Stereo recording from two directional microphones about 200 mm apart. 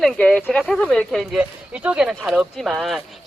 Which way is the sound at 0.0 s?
5° left (ahead or behind).